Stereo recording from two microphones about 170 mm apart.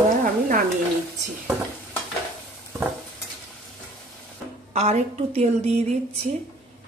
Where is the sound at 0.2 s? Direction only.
50° right (ahead or behind).